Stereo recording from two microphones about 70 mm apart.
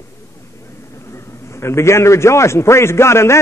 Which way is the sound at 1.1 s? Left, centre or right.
Left.